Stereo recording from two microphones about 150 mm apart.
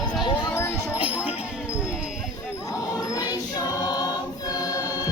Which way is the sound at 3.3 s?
25° left (ahead or behind).